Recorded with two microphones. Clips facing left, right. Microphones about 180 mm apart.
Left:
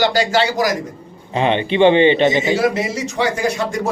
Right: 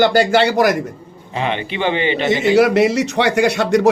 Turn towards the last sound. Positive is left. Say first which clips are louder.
# right 6 dB
turn(degrees=-75)  # may be behind; listen again after turning